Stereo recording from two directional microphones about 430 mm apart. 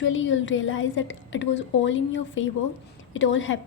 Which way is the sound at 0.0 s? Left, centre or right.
Left.